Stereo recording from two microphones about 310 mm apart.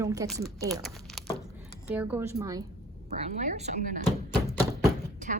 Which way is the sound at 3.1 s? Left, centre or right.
Right.